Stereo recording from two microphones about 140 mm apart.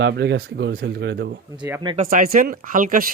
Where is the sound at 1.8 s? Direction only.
35° right (ahead or behind).